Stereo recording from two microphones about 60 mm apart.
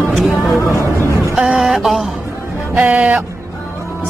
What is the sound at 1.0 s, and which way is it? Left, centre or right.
Music, right.